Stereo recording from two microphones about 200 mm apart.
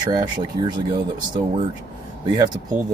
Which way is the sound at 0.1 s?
20° right (ahead or behind).